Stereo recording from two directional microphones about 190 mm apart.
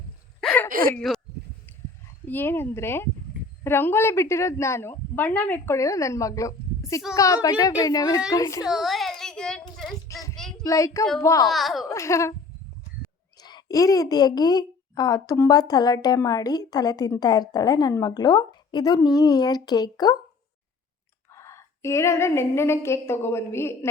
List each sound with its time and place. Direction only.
0.4 s a sound: 5° left (ahead or behind)
0.9 s speech: centre (ahead or behind)
2.2 s a woman's voice: 10° left (ahead or behind)
8.6 s a sound: centre (ahead or behind)
10.1 s child singing: 15° left (ahead or behind)
10.6 s a woman's voice: 15° left (ahead or behind)
11.4 s a child's voice: centre (ahead or behind)
11.9 s a woman's voice: 15° left (ahead or behind)
13.4 s a woman's voice: 20° left (ahead or behind)
21.3 s a woman's voice: 15° left (ahead or behind)